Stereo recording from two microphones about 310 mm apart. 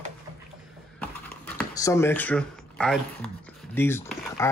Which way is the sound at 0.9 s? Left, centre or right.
Centre.